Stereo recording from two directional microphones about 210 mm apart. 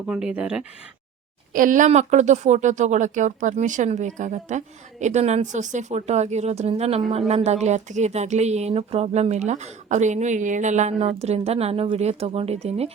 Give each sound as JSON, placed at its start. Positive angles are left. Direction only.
{"t": 0.1, "sound": "speech", "side_deg": -5}
{"t": 1.5, "sound": "speech", "side_deg": -40}